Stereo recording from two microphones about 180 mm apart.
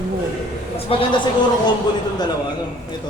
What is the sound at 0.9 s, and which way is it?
Speech, 25° left (ahead or behind).